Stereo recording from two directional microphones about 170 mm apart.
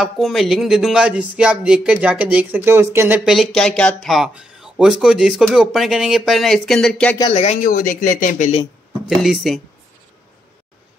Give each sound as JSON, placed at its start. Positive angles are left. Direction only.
{"t": 0.0, "sound": "speech", "side_deg": 0}
{"t": 3.3, "sound": "speech", "side_deg": 0}
{"t": 7.3, "sound": "speech", "side_deg": 45}
{"t": 9.0, "sound": "speech", "side_deg": 0}